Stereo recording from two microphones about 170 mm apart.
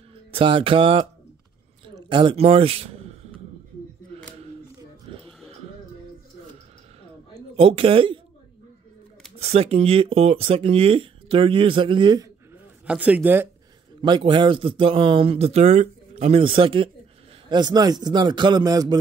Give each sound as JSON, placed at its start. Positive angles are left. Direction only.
{"t": 0.3, "sound": "a man's voice", "side_deg": -30}
{"t": 7.5, "sound": "speech", "side_deg": -35}
{"t": 9.5, "sound": "speech", "side_deg": -35}
{"t": 12.8, "sound": "speech", "side_deg": -5}
{"t": 14.0, "sound": "a man's voice", "side_deg": -25}